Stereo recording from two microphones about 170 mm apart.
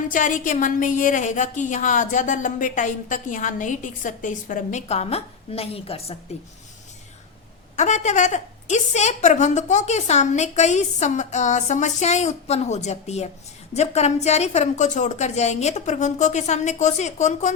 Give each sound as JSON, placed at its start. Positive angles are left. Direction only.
{"t": 0.1, "sound": "a woman's voice", "side_deg": 50}
{"t": 7.8, "sound": "a woman's voice", "side_deg": 45}